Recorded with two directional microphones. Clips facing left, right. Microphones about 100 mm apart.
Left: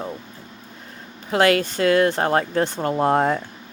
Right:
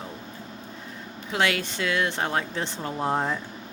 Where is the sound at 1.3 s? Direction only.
45° left (ahead or behind).